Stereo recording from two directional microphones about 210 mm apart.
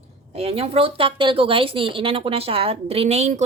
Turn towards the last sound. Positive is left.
turn(degrees=-30)  # may be behind; listen again after turning